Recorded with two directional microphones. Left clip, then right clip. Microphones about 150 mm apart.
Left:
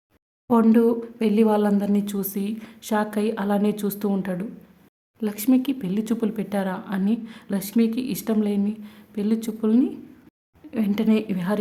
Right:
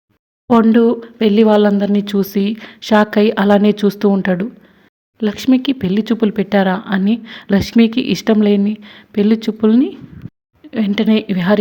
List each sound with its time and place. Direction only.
0.7 s a woman's voice: 20° right (ahead or behind)
10.7 s a woman's voice: 20° right (ahead or behind)